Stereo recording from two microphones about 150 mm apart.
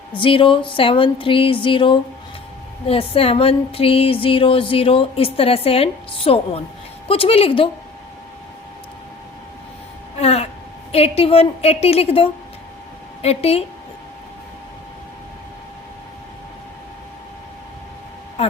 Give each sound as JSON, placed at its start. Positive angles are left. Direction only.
{"t": 0.1, "sound": "music", "side_deg": 35}
{"t": 10.2, "sound": "a sound", "side_deg": 45}
{"t": 10.9, "sound": "music", "side_deg": 40}